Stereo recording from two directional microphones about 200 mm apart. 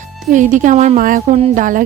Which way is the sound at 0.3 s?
40° right (ahead or behind).